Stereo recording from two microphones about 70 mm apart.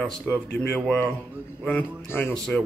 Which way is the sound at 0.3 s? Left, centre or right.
Left.